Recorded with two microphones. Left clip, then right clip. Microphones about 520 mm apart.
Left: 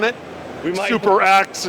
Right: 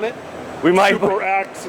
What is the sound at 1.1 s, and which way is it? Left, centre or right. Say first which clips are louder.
Speech: left 6 dB; left.